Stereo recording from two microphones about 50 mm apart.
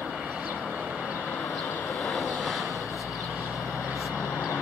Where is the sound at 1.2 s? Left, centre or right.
Left.